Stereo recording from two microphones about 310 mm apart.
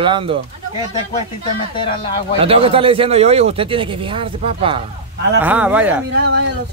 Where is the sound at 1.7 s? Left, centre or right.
Centre.